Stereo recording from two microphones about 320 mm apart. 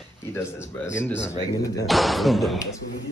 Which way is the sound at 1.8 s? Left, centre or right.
Centre.